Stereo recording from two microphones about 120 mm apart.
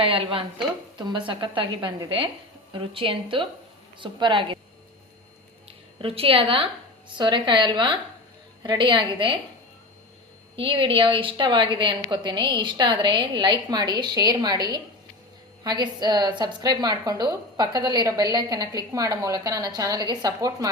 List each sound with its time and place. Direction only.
0.0 s a woman's voice: 50° right (ahead or behind)
0.9 s a woman's voice: 40° right (ahead or behind)
6.0 s a woman's voice: 50° right (ahead or behind)
10.5 s a woman's voice: 50° right (ahead or behind); by 20.7 s 30° right (ahead or behind)